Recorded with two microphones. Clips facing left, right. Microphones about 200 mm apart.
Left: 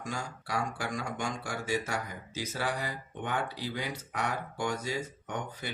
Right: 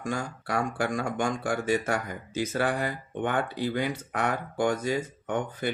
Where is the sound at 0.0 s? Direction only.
55° right (ahead or behind).